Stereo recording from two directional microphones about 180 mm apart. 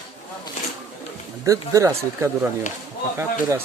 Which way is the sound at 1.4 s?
20° right (ahead or behind).